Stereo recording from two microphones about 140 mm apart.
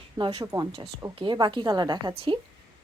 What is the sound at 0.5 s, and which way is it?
A woman's voice, 25° right (ahead or behind).